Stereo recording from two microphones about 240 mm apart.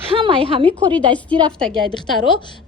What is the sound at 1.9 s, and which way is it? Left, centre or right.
Speech, centre.